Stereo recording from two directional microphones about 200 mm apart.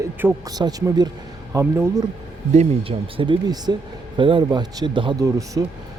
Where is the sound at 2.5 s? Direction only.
30° right (ahead or behind).